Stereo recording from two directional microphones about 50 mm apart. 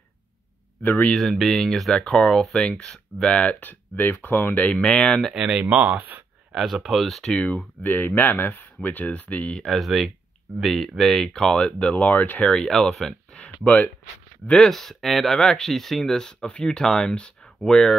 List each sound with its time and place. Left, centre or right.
1.1 s speech: centre
3.3 s speech: left
4.8 s speech: centre
5.3 s speech: centre
5.7 s speech: right
6.5 s speech: centre
7.3 s speech: left
9.7 s speech: centre; by 12.4 s left
12.4 s speech: centre
14.7 s speech: centre